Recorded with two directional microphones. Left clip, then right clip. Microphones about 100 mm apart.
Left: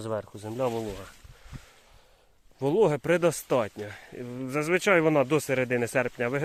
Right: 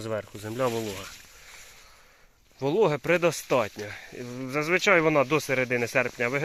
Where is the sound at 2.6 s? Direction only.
60° left (ahead or behind).